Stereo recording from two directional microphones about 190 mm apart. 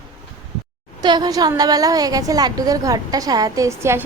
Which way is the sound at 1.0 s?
20° right (ahead or behind).